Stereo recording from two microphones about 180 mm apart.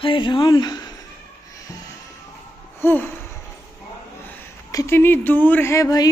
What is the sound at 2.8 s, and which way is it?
Speech, 10° left (ahead or behind).